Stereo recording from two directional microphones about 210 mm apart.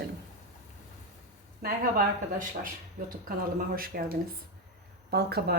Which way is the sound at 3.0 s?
40° right (ahead or behind).